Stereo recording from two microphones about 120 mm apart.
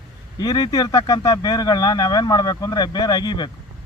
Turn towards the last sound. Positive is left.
turn(degrees=35)  # may be behind; listen again after turning